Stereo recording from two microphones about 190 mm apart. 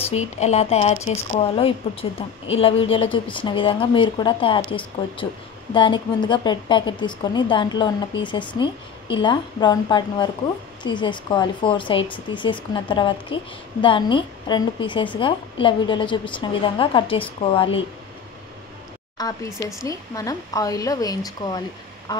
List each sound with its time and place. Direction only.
0.4 s a woman's voice: 35° left (ahead or behind)
19.1 s a woman's voice: 20° left (ahead or behind)
22.1 s quack: 20° left (ahead or behind)